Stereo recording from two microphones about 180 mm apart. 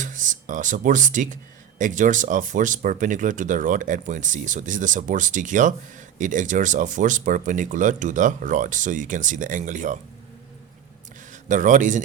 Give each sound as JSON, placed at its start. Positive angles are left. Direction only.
{"t": 0.0, "sound": "speech", "side_deg": -45}
{"t": 11.3, "sound": "speech", "side_deg": -45}